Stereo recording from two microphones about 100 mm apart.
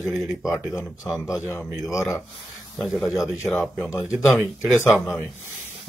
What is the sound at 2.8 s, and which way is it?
Speech, centre (ahead or behind).